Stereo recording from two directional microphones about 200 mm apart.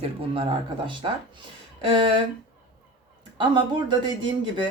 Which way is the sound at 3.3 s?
20° right (ahead or behind).